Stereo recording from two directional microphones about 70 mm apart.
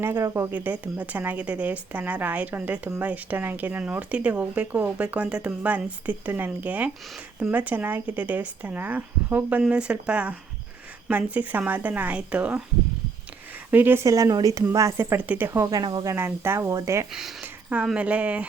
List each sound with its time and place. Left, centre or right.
0.2 s speech: right
0.5 s speech: right
13.7 s speech: right
14.0 s speech: right
15.2 s speech: right
15.4 s speech: right
15.7 s speech: right
16.0 s speech: right
16.6 s speech: right
17.1 s speech: centre
17.4 s a sound: right
17.8 s speech: centre